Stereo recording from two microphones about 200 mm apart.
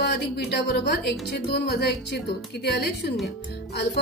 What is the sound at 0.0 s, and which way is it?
A woman's voice, 55° left (ahead or behind).